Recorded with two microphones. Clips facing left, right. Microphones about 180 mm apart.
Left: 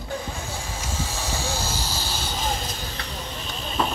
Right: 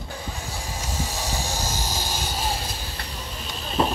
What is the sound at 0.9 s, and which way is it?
Vehicle, 15° right (ahead or behind).